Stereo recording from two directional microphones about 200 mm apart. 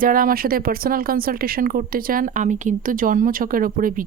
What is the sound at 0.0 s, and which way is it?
Speech, 45° right (ahead or behind).